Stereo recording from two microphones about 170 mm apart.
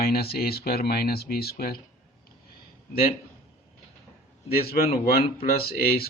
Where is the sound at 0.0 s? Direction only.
65° left (ahead or behind).